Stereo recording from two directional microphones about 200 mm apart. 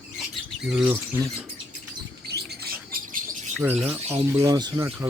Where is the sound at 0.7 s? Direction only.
5° right (ahead or behind).